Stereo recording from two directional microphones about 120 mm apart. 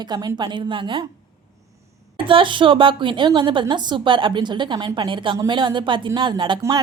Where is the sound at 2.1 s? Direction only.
45° right (ahead or behind).